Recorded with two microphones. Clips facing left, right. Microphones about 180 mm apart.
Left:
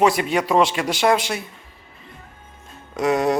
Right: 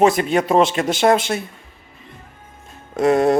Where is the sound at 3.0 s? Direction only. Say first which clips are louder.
Right 4 dB; 50° right (ahead or behind).